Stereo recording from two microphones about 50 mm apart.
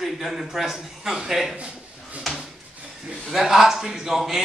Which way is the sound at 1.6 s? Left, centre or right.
Right.